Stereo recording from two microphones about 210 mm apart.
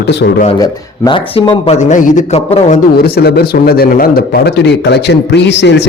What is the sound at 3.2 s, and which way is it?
Speech, 50° left (ahead or behind).